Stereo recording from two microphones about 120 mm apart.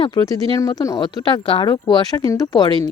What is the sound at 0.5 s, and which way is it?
Speech, 30° left (ahead or behind).